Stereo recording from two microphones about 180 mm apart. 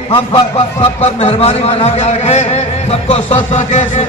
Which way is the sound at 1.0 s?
35° left (ahead or behind).